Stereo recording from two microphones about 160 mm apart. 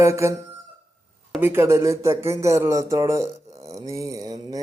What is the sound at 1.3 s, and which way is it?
Speech, 15° right (ahead or behind).